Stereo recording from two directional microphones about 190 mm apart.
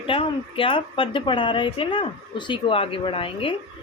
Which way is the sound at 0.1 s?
30° left (ahead or behind).